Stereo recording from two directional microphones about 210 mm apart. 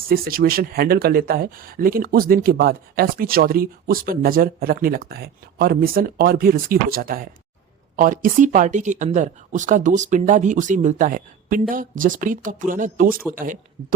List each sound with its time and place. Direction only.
0.1 s speech: 45° right (ahead or behind)